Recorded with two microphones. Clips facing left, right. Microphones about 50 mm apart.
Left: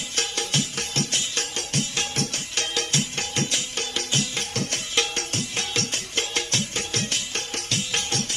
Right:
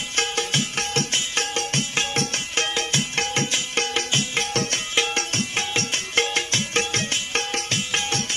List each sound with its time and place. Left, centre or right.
0.2 s music: right
4.9 s music: right